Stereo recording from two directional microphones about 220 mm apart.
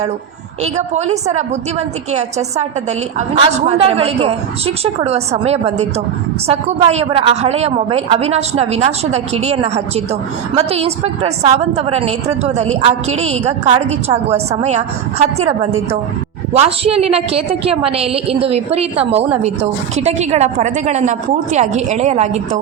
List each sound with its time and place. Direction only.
0.6 s a woman's voice: 30° right (ahead or behind)
3.2 s a woman's voice: 30° right (ahead or behind)
16.6 s a woman's voice: 25° right (ahead or behind)